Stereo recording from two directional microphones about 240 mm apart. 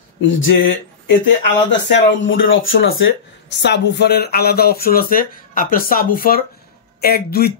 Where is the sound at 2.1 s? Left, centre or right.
Left.